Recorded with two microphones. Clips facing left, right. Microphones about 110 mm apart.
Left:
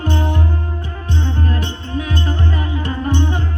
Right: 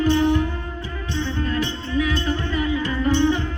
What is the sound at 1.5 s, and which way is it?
Music, 50° left (ahead or behind).